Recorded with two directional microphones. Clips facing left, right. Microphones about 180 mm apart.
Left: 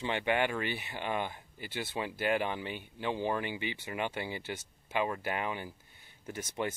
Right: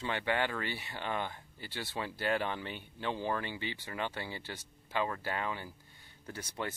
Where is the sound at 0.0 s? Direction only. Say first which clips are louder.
Left 3 dB; 20° left (ahead or behind).